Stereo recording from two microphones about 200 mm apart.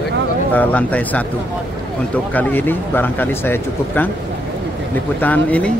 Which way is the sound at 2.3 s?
10° left (ahead or behind).